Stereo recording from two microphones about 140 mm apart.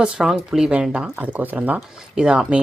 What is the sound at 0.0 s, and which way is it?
Speech, 5° right (ahead or behind).